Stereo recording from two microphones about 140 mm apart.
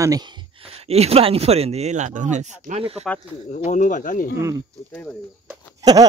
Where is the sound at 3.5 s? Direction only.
65° left (ahead or behind).